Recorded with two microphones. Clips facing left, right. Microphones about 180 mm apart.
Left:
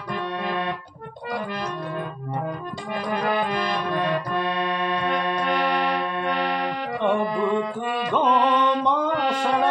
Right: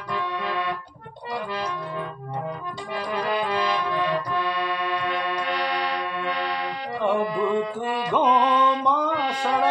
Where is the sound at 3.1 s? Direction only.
50° left (ahead or behind).